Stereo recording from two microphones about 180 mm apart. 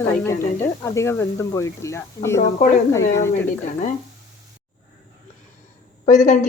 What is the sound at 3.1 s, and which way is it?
Speech, 15° left (ahead or behind).